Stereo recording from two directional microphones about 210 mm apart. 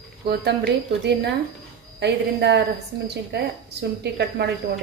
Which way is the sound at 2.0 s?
55° right (ahead or behind).